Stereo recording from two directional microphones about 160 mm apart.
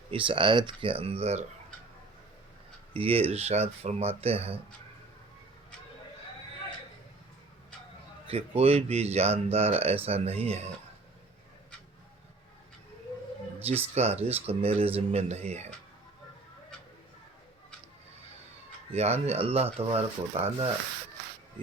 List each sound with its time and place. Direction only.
0.1 s speech: 30° right (ahead or behind)
2.9 s speech: 35° right (ahead or behind)
8.3 s speech: 40° right (ahead or behind)
13.6 s speech: 40° right (ahead or behind)
18.9 s speech: 40° right (ahead or behind)